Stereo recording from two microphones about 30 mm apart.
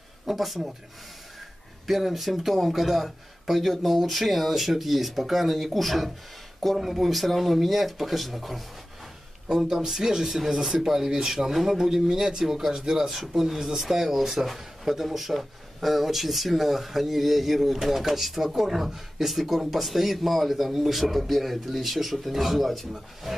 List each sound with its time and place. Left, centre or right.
0.3 s a man's voice: centre
1.9 s a man's voice: centre
9.5 s speech: centre
11.1 s speech: right
11.5 s a man's voice: centre